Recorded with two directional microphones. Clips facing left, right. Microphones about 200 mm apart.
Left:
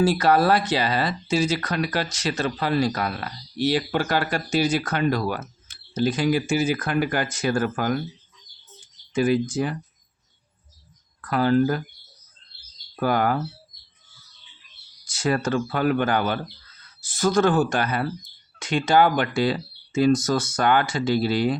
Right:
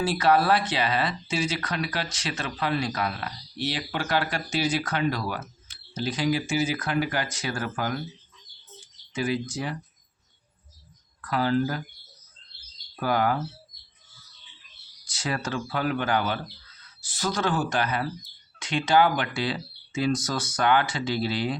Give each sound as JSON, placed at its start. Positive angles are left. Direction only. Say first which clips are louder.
{"t": 0.0, "sound": "speech", "louder": "left 4 dB", "side_deg": 40}
{"t": 9.1, "sound": "speech", "louder": "left 7 dB", "side_deg": 50}
{"t": 11.2, "sound": "speech", "louder": "left 5 dB", "side_deg": 50}
{"t": 13.0, "sound": "speech", "louder": "left 3 dB", "side_deg": 50}
{"t": 15.1, "sound": "a sound", "louder": "left 7 dB", "side_deg": 50}
{"t": 15.4, "sound": "speech", "louder": "left 6 dB", "side_deg": 50}